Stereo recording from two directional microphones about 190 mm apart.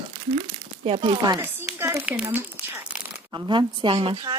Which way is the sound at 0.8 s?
25° right (ahead or behind).